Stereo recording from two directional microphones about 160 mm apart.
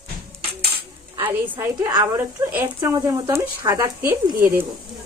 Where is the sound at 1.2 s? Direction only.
15° right (ahead or behind).